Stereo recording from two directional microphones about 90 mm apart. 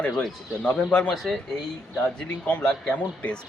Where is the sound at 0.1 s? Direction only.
10° left (ahead or behind).